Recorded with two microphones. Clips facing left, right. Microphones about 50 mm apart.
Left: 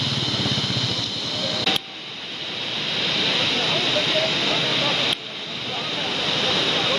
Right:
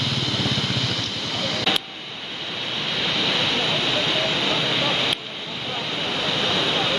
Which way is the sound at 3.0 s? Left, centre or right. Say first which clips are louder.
Even; right.